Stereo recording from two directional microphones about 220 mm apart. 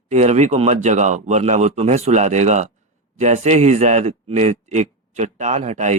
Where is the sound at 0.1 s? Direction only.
30° right (ahead or behind).